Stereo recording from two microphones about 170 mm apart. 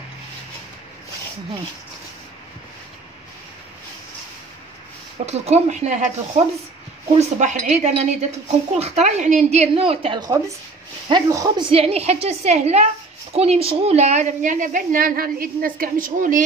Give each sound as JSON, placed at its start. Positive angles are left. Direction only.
{"t": 5.2, "sound": "a woman's voice", "side_deg": -40}
{"t": 11.7, "sound": "a woman's voice", "side_deg": -35}